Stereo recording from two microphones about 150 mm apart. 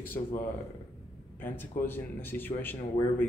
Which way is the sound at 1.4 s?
15° left (ahead or behind).